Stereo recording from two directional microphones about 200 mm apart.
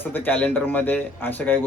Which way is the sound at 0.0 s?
10° left (ahead or behind).